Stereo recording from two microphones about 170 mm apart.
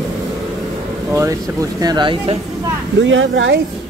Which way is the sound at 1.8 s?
25° right (ahead or behind).